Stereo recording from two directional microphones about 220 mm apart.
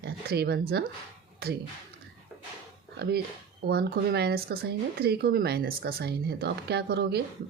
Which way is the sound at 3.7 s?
45° right (ahead or behind).